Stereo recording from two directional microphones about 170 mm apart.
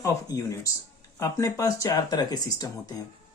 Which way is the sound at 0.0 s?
20° left (ahead or behind).